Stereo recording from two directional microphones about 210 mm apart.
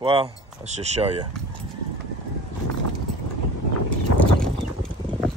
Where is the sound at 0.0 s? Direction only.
25° right (ahead or behind).